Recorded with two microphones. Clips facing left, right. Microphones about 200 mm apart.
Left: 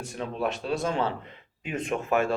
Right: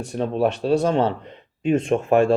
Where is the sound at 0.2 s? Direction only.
35° right (ahead or behind).